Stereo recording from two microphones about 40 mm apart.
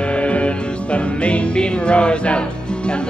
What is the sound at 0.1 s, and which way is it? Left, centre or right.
Music, left.